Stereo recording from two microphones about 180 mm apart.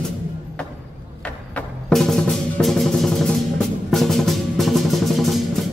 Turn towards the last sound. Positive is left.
turn(degrees=0)  # may be behind; listen again after turning